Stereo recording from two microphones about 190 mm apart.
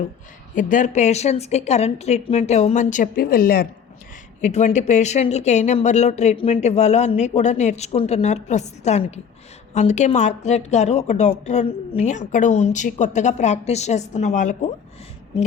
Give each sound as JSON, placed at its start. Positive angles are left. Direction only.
{"t": 0.5, "sound": "speech", "side_deg": 40}
{"t": 4.4, "sound": "speech", "side_deg": 35}